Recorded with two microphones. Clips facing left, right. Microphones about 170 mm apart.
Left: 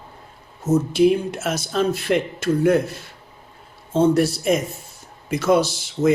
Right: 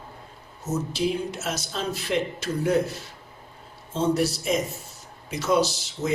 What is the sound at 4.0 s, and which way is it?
A man's voice, 55° left (ahead or behind).